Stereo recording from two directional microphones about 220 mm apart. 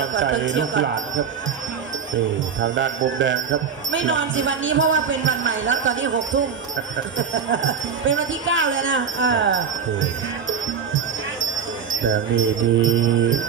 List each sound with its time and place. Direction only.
0.0 s speech: 55° right (ahead or behind)
2.6 s speech: 55° right (ahead or behind)
12.0 s speech: 60° right (ahead or behind)